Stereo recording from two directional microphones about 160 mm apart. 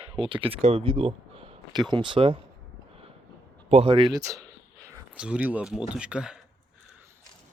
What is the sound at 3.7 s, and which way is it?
Speech, 35° right (ahead or behind).